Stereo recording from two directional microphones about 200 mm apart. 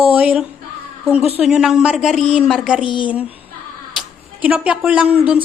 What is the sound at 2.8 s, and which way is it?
Speech, 25° left (ahead or behind).